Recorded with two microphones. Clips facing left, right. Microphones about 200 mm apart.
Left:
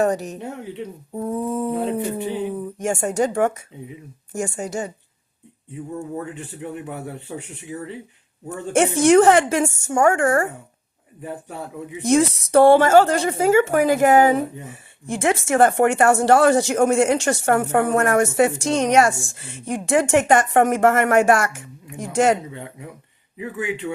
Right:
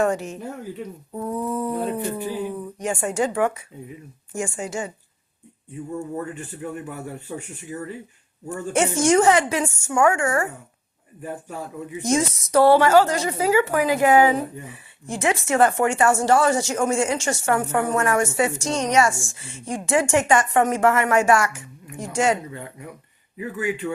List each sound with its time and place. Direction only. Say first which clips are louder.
0.0 s a woman's voice: left 2 dB; 40° left (ahead or behind)
0.6 s speech: left 1 dB; 25° left (ahead or behind)
2.7 s a woman's voice: left 2 dB; 45° left (ahead or behind)
8.7 s a woman's voice: left 4 dB; 60° left (ahead or behind)
12.0 s a woman's voice: left 5 dB; 60° left (ahead or behind)
23.6 s speech: right 1 dB; 25° left (ahead or behind)